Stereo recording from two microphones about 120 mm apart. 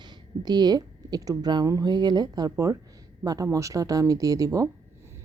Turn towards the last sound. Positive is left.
turn(degrees=-30)  # may be behind; listen again after turning